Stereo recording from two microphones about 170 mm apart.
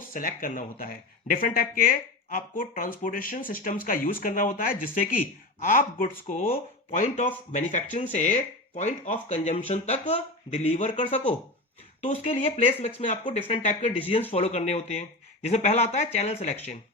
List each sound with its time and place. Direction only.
0.1 s speech: 55° left (ahead or behind)
7.5 s speech: 45° left (ahead or behind)